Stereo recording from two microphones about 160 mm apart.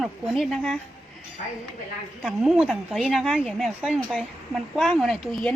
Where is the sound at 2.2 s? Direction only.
5° right (ahead or behind).